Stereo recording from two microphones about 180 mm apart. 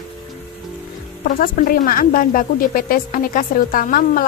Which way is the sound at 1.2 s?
50° left (ahead or behind).